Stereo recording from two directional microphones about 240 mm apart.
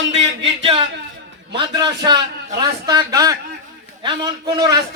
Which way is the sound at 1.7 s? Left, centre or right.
Centre.